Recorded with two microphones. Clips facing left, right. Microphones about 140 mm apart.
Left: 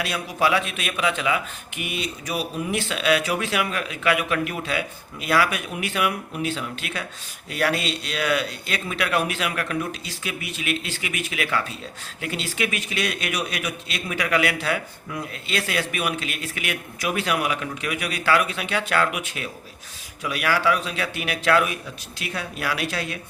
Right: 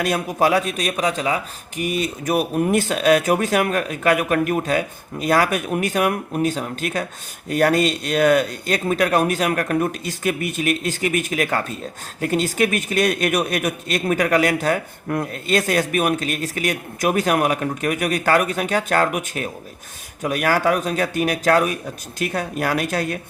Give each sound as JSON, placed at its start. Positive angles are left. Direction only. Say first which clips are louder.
{"t": 0.0, "sound": "a man's voice", "louder": "right 5 dB", "side_deg": -45}